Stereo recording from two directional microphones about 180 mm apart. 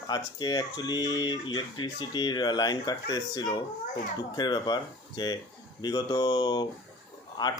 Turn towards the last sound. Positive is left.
turn(degrees=20)  # may be behind; listen again after turning